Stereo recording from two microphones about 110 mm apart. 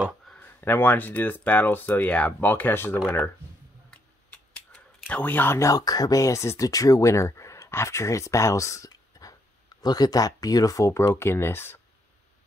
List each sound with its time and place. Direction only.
0.3 s speech: 15° left (ahead or behind)
3.9 s speech: 10° left (ahead or behind)